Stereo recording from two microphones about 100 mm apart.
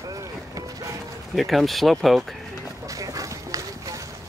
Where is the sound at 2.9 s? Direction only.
35° right (ahead or behind).